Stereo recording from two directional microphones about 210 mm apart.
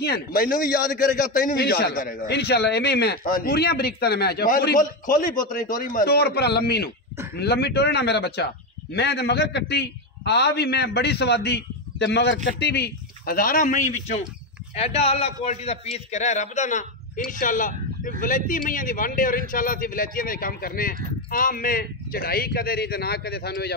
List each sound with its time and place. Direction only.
0.0 s a man's voice: 45° left (ahead or behind)